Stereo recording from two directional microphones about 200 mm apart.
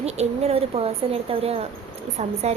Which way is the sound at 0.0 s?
30° right (ahead or behind).